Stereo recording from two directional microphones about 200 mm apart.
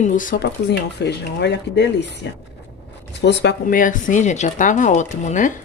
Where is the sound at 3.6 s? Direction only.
40° left (ahead or behind).